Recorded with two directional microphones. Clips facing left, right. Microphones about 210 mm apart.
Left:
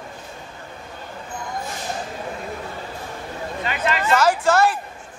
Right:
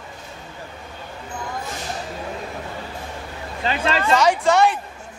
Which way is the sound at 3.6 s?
30° right (ahead or behind).